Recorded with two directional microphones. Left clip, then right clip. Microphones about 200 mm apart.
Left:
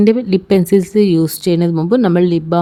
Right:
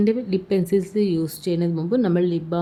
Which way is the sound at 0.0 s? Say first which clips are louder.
Left 9 dB; 50° left (ahead or behind).